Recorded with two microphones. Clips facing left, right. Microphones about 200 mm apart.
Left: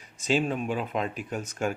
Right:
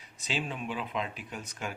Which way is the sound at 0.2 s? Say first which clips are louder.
Left 9 dB; 45° left (ahead or behind).